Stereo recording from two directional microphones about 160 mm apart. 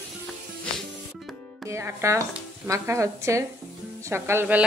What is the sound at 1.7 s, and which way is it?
Speech, 15° right (ahead or behind).